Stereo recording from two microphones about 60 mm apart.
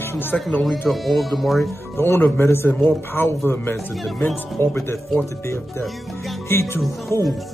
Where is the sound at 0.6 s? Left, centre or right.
Centre.